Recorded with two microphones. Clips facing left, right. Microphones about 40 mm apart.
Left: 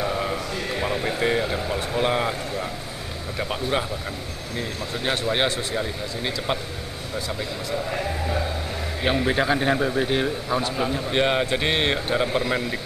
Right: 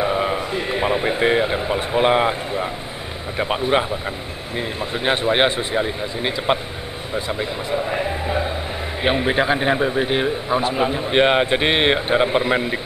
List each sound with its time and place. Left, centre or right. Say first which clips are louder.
0.0 s a man's voice: right 5 dB; right